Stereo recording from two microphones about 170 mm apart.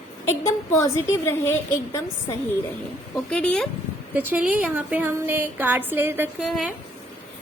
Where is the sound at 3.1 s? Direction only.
5° left (ahead or behind).